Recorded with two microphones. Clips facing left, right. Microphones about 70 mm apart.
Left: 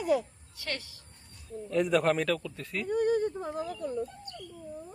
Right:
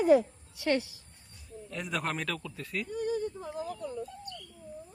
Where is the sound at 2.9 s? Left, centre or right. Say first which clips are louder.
Left 7 dB; left.